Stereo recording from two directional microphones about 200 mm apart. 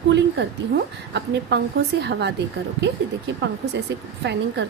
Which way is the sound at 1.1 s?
55° right (ahead or behind).